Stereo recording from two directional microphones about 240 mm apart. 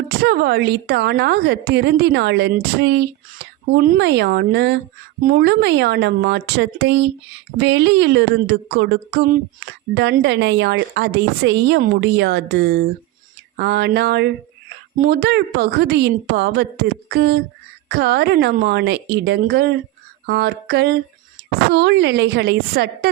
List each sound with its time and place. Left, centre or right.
0.2 s a woman's voice: right